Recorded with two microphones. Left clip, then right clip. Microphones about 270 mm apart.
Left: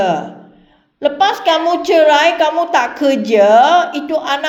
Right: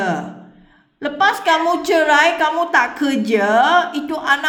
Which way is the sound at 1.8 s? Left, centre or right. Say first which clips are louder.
Left 5 dB; right.